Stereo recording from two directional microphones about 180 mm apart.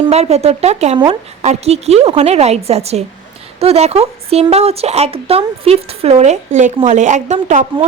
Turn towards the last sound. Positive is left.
turn(degrees=-45)  # may be behind; listen again after turning